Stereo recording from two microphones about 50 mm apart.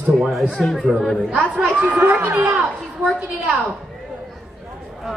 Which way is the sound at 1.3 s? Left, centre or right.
Right.